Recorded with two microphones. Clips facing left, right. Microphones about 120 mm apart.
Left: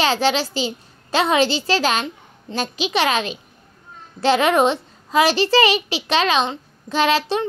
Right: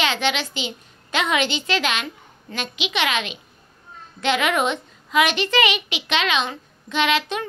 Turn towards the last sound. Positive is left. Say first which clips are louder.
# left 3 dB
turn(degrees=35)  # may be behind; listen again after turning